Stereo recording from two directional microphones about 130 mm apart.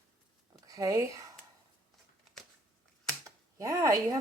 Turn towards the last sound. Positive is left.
turn(degrees=-25)  # may be behind; listen again after turning